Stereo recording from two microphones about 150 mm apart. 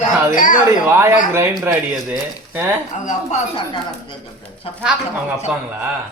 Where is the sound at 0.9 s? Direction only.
15° right (ahead or behind).